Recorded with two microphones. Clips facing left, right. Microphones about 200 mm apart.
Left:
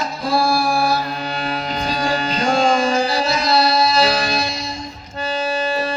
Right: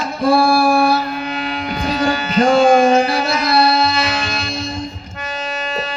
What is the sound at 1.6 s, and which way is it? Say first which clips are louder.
Music: right 6 dB; 55° right (ahead or behind).